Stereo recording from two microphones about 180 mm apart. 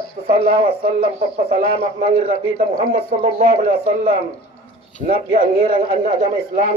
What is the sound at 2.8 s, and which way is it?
A man's voice, 50° right (ahead or behind).